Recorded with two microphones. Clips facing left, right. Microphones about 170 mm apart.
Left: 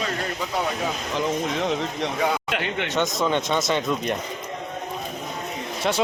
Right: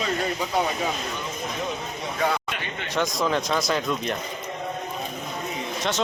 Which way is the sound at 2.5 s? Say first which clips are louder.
Left 7 dB; 70° left (ahead or behind).